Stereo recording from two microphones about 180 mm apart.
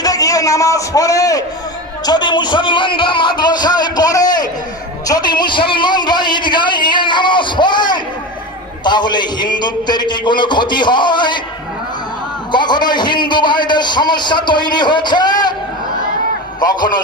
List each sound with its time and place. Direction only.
0.0 s a man's voice: 20° left (ahead or behind)
12.5 s a man's voice: 25° left (ahead or behind)
16.6 s a man's voice: 25° left (ahead or behind)